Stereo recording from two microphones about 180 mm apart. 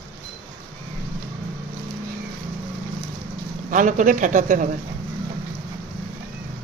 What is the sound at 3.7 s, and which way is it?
Speech, 45° right (ahead or behind).